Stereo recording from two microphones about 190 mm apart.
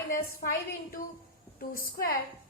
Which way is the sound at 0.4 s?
50° left (ahead or behind).